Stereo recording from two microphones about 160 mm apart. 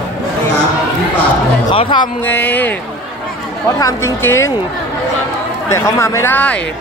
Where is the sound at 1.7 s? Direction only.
30° left (ahead or behind).